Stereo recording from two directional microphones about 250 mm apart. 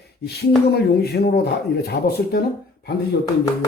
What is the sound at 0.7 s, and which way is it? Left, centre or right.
Speech, left.